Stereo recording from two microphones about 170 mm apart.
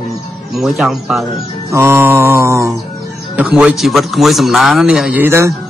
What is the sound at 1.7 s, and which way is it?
Speech, 15° right (ahead or behind).